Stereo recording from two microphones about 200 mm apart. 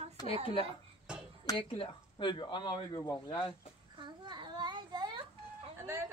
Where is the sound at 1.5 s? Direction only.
25° left (ahead or behind).